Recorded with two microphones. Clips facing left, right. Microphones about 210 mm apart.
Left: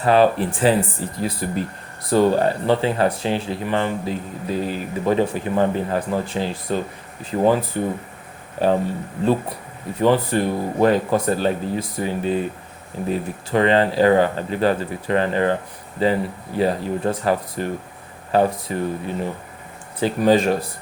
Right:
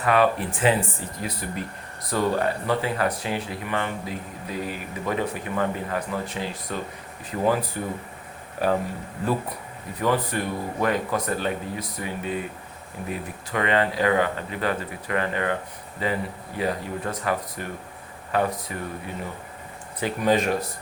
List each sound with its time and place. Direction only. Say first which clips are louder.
0.0 s speech: left 5 dB; 30° left (ahead or behind)